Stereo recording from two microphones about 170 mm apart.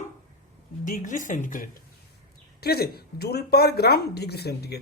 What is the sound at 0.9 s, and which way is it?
Speech, 50° left (ahead or behind).